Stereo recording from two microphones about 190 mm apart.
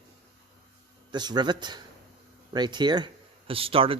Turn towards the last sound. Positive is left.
turn(degrees=-30)  # may be behind; listen again after turning